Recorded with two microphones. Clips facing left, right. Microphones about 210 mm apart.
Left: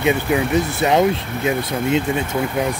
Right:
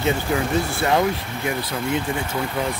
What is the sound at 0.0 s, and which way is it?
Speech, 20° left (ahead or behind).